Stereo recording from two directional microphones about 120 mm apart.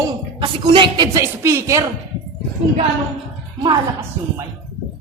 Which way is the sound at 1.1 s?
25° right (ahead or behind).